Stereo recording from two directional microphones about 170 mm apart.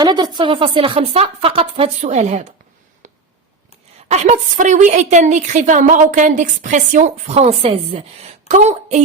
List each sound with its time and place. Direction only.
0.0 s speech: 25° right (ahead or behind); by 2.5 s 40° right (ahead or behind)
3.0 s a sound: 45° right (ahead or behind)
4.1 s a woman's voice: 45° right (ahead or behind)